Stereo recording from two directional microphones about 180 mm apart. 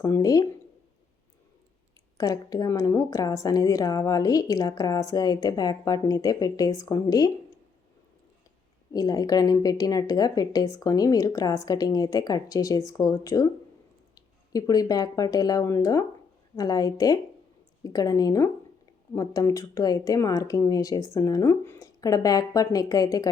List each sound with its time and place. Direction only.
0.0 s a woman's voice: 20° left (ahead or behind)
2.1 s a woman's voice: 20° left (ahead or behind)
8.9 s a woman's voice: 20° left (ahead or behind)